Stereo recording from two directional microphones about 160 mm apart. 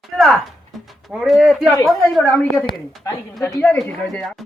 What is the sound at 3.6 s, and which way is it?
Speech, 5° left (ahead or behind).